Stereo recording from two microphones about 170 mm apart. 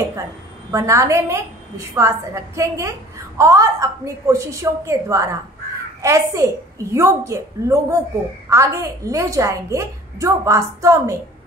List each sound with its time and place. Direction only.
0.7 s a woman's voice: 15° right (ahead or behind)